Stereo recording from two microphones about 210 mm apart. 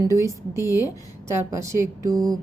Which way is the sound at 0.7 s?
15° left (ahead or behind).